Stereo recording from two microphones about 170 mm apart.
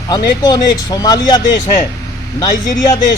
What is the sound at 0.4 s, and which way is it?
Speech, 20° left (ahead or behind).